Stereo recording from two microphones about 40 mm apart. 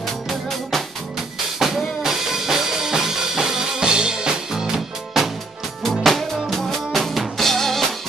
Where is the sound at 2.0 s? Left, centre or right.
Centre.